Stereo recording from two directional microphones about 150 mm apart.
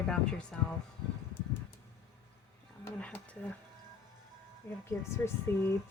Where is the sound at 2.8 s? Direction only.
10° left (ahead or behind).